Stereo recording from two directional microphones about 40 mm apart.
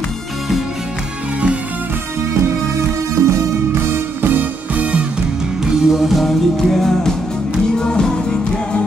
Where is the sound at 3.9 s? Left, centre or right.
Right.